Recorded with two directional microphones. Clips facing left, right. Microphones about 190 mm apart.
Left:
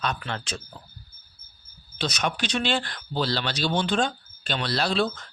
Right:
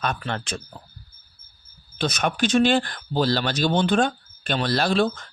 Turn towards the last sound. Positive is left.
turn(degrees=-50)  # may be behind; listen again after turning